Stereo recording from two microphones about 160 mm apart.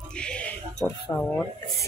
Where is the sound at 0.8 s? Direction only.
15° left (ahead or behind).